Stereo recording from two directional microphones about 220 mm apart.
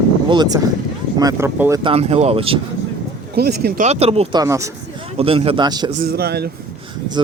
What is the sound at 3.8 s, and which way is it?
Speech, 30° right (ahead or behind).